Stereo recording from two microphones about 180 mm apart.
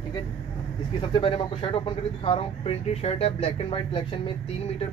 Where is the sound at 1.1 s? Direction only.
30° left (ahead or behind).